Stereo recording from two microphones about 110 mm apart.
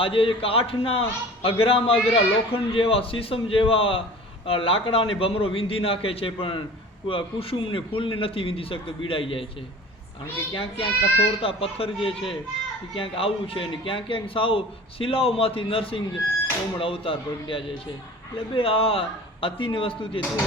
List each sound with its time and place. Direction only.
0.0 s a man's voice: 55° left (ahead or behind)
10.5 s a man's voice: 55° left (ahead or behind)